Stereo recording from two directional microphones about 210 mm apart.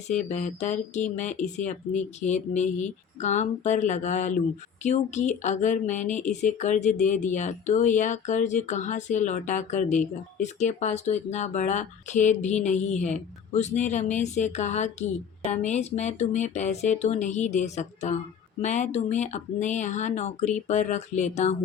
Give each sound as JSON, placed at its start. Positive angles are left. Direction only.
{"t": 0.1, "sound": "speech", "side_deg": 35}